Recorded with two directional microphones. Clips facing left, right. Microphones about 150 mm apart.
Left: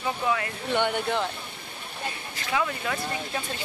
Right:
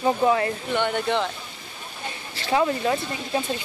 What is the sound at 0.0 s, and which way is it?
Speech, 35° right (ahead or behind).